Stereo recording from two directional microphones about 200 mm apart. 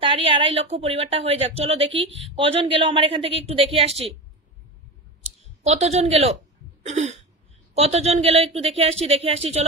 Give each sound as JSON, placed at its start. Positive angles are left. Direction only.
{"t": 0.0, "sound": "a woman's voice", "side_deg": -25}
{"t": 5.6, "sound": "a woman's voice", "side_deg": -35}
{"t": 6.8, "sound": "a sound", "side_deg": -35}
{"t": 7.7, "sound": "a woman's voice", "side_deg": -30}